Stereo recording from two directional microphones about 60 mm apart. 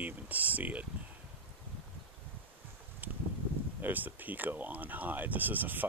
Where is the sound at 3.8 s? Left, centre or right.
Right.